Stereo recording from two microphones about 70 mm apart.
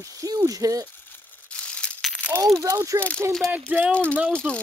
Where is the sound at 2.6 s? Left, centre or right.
Right.